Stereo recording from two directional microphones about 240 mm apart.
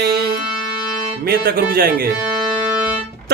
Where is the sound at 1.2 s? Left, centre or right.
Right.